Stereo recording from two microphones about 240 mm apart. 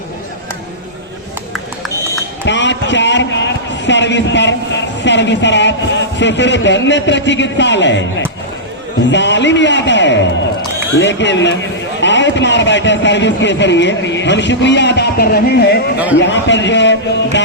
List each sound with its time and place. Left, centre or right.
2.5 s a man's voice: left
9.0 s a man's voice: left